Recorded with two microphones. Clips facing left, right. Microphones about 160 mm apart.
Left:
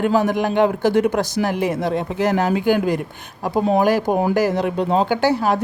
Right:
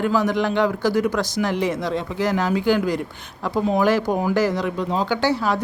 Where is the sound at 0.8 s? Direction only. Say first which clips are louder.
Left 3 dB; 60° left (ahead or behind).